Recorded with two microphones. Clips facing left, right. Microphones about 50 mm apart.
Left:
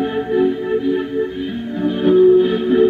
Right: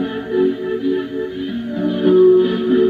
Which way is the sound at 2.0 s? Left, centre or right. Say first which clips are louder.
Even; centre.